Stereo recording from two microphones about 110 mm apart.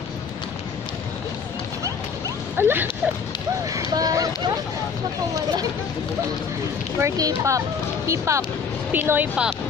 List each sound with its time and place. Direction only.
2.5 s speech: 20° right (ahead or behind)
3.7 s speech: 35° right (ahead or behind)
7.0 s speech: 30° right (ahead or behind)
8.9 s a woman's voice: 15° right (ahead or behind)